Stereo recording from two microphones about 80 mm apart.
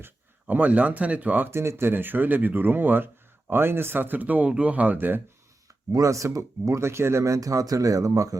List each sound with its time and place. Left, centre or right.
0.0 s speech: right
1.5 s speech: right
5.9 s speech: right